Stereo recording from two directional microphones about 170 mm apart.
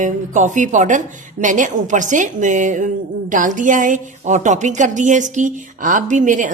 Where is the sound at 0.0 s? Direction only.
45° right (ahead or behind).